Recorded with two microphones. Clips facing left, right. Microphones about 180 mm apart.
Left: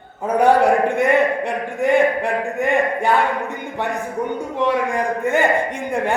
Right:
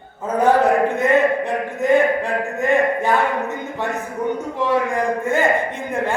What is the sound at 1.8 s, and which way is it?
A man's voice, 15° left (ahead or behind).